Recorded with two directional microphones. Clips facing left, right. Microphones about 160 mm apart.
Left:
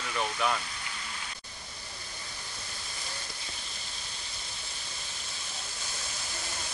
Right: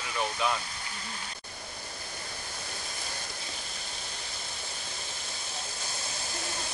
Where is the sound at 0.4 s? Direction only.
20° right (ahead or behind).